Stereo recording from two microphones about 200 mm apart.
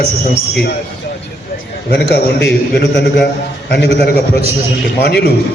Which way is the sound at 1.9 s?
55° left (ahead or behind).